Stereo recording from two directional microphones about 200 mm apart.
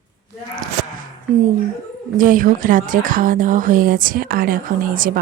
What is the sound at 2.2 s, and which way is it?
A woman's voice, 45° right (ahead or behind).